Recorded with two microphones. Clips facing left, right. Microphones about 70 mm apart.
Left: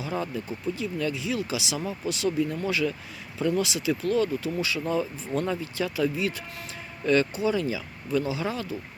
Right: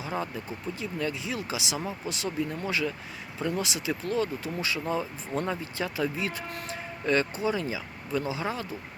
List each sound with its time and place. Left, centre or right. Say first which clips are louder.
0.0 s speech: left 2 dB; right